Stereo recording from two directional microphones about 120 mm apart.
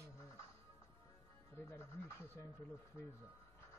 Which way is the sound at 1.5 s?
20° left (ahead or behind).